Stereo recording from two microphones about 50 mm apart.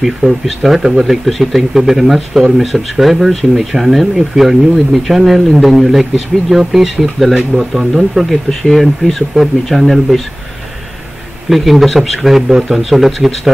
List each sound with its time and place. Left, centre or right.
0.2 s speech: right
0.7 s speech: centre
8.3 s speech: centre
11.4 s speech: centre